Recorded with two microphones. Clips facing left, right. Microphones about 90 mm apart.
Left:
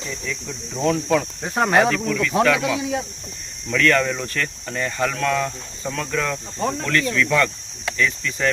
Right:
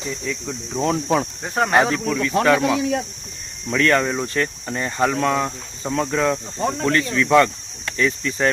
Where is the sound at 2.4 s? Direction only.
35° right (ahead or behind).